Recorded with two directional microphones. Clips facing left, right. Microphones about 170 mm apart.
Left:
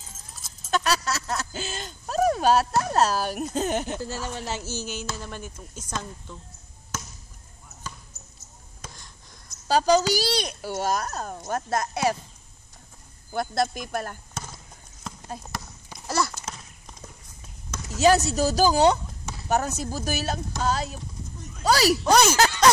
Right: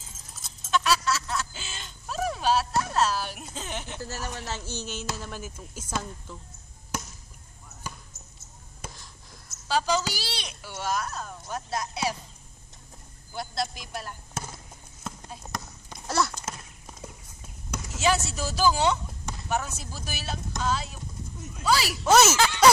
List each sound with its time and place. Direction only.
0.7 s a sound: 40° left (ahead or behind)
2.8 s a child's voice: 40° left (ahead or behind)
4.0 s speech: 15° left (ahead or behind); by 6.3 s 5° right (ahead or behind)
7.8 s basketball bounce: 10° right (ahead or behind)
8.8 s a sound: 5° right (ahead or behind)
9.7 s a child's voice: 40° left (ahead or behind)
13.3 s a child's voice: 50° left (ahead or behind)
15.5 s clip-clop: centre (ahead or behind)
17.9 s speech: 40° left (ahead or behind)
22.0 s speech: 5° right (ahead or behind)
22.3 s speech: 40° left (ahead or behind)